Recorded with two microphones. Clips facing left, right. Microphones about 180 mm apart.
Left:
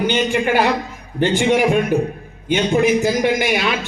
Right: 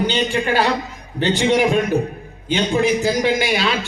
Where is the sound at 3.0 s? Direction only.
15° left (ahead or behind).